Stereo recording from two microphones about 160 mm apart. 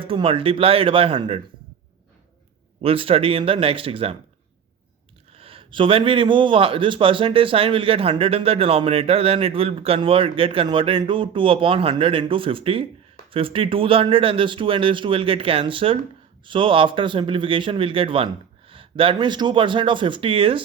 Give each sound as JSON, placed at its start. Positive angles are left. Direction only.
{"t": 0.0, "sound": "speech", "side_deg": -35}
{"t": 2.8, "sound": "speech", "side_deg": -35}
{"t": 5.4, "sound": "speech", "side_deg": -35}